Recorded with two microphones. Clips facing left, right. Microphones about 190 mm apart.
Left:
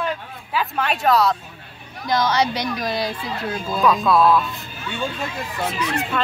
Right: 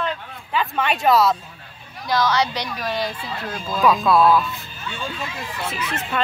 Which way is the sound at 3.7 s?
Centre (ahead or behind).